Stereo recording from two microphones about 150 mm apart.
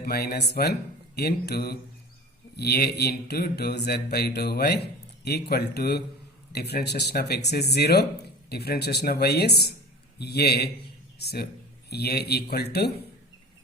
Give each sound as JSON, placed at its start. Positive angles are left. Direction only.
{"t": 0.0, "sound": "mantra", "side_deg": 90}